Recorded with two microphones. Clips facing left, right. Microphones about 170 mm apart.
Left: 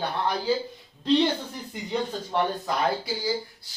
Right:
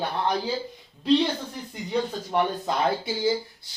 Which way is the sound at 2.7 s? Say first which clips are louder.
Right 1 dB; 20° right (ahead or behind).